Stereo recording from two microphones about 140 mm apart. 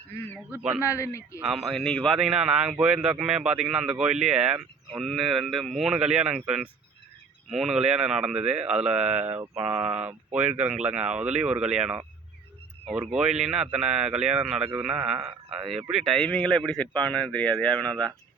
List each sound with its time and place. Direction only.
0.8 s a man's voice: 20° left (ahead or behind)
1.5 s a man's voice: centre (ahead or behind)